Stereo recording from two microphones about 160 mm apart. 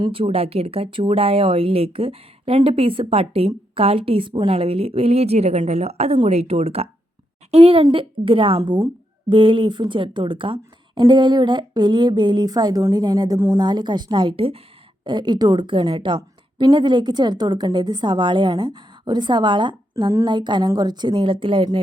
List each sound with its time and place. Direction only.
0.0 s a woman's voice: 35° right (ahead or behind)